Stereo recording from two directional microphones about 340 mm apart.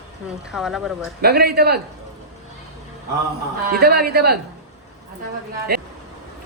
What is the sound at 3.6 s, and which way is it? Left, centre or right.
Speech, right.